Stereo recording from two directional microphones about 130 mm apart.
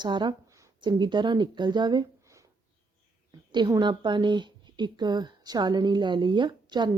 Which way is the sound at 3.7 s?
35° right (ahead or behind).